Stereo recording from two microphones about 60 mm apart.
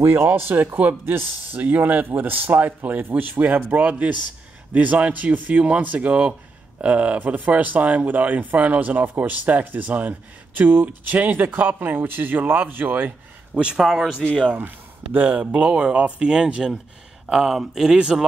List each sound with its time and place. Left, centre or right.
0.2 s speech: right
13.6 s speech: centre
15.1 s speech: right; by 18.1 s centre